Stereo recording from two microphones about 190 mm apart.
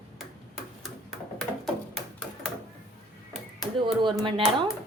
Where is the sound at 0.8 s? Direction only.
Centre (ahead or behind).